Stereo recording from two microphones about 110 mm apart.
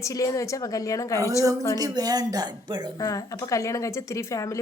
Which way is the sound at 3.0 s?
30° left (ahead or behind).